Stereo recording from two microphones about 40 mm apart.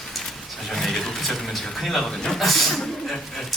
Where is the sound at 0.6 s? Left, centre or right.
Centre.